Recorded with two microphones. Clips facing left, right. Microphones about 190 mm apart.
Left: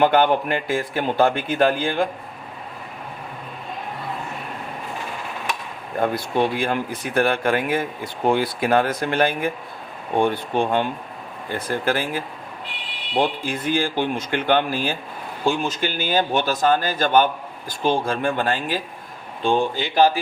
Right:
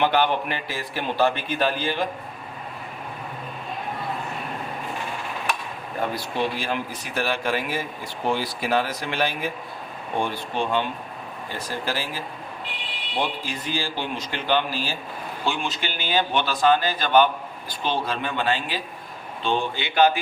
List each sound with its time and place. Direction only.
0.0 s speech: 45° left (ahead or behind)
6.0 s speech: 55° left (ahead or behind)
13.4 s speech: 50° left (ahead or behind)